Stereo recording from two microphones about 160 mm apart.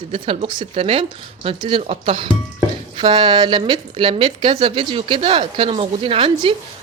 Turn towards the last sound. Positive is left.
turn(degrees=-30)  # may be behind; listen again after turning